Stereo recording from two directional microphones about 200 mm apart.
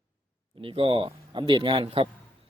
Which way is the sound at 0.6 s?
25° right (ahead or behind).